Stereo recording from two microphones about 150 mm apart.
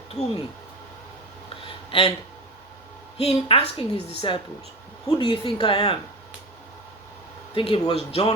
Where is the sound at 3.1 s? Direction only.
45° left (ahead or behind).